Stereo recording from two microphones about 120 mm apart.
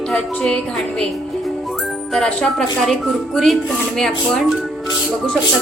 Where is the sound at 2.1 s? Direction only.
5° left (ahead or behind).